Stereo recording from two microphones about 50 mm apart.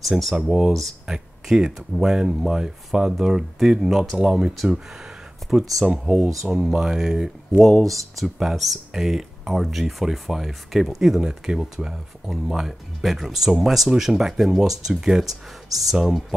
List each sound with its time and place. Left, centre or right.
0.4 s speech: centre
4.2 s speech: centre
5.5 s speech: centre
7.6 s speech: centre